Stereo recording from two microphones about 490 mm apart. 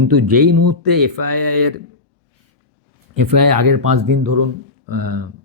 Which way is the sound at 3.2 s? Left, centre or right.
Right.